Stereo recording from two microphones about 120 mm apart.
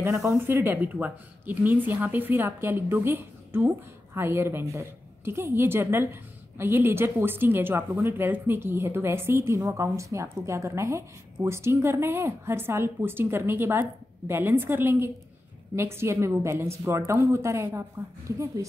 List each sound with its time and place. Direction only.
0.0 s speech: 20° right (ahead or behind)